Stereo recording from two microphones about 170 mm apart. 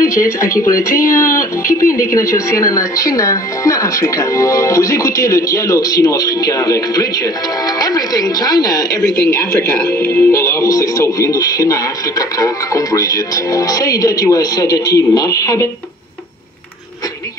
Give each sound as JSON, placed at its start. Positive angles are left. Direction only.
{"t": 0.0, "sound": "a woman's voice", "side_deg": 15}
{"t": 9.9, "sound": "speech", "side_deg": 15}